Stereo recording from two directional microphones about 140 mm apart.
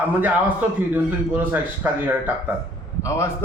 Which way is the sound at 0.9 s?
15° right (ahead or behind).